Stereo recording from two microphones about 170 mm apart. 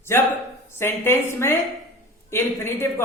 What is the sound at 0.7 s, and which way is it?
Speech, 15° left (ahead or behind).